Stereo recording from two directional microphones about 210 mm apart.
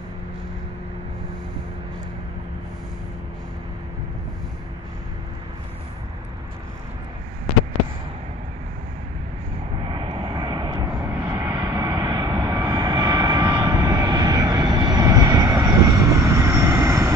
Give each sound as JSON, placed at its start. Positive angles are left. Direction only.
{"t": 9.8, "sound": "vehicle", "side_deg": -25}